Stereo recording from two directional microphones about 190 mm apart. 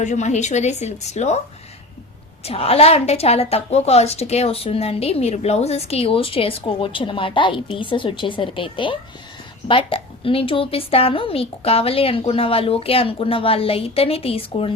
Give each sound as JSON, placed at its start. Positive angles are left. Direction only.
{"t": 0.0, "sound": "a woman's voice", "side_deg": 40}
{"t": 2.4, "sound": "a woman's voice", "side_deg": 30}